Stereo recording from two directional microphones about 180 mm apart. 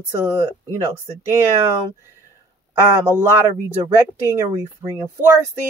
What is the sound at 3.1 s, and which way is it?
Speech, 15° right (ahead or behind).